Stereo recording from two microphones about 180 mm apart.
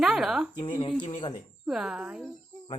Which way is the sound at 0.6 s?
30° left (ahead or behind).